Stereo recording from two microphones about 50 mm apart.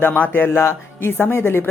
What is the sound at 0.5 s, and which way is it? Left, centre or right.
Speech, left.